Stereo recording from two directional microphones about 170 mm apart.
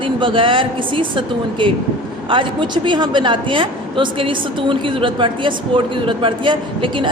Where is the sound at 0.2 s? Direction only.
30° right (ahead or behind).